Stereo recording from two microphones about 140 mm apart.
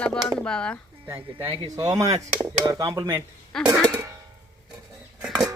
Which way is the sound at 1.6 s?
30° right (ahead or behind).